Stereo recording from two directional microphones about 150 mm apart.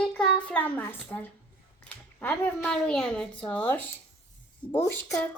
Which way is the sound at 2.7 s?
5° left (ahead or behind).